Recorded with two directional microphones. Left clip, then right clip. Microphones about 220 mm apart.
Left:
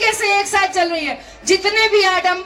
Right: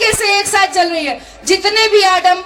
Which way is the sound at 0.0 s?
30° right (ahead or behind).